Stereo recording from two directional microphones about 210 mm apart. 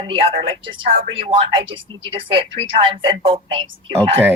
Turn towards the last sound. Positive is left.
turn(degrees=-25)  # may be behind; listen again after turning